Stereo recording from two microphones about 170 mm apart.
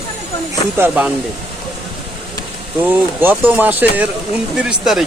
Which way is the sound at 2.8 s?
10° right (ahead or behind).